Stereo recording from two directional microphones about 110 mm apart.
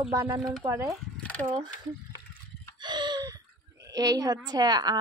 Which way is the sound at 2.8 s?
40° right (ahead or behind).